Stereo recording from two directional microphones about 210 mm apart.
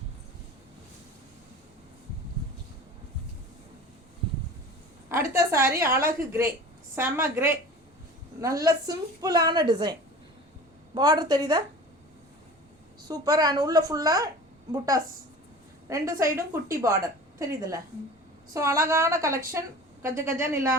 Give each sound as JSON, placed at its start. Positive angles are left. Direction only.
{"t": 5.1, "sound": "a woman's voice", "side_deg": -15}
{"t": 10.9, "sound": "a woman's voice", "side_deg": -20}
{"t": 13.0, "sound": "a woman's voice", "side_deg": -20}